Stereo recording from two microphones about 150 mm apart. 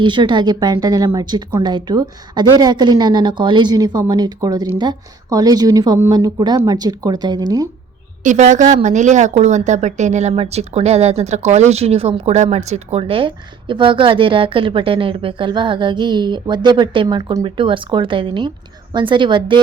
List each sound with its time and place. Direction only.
0.0 s a woman's voice: 30° right (ahead or behind)
8.2 s a woman's voice: 55° right (ahead or behind); by 19.5 s 35° right (ahead or behind)